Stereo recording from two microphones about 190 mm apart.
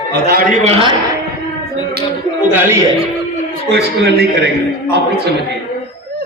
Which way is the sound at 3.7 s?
60° right (ahead or behind).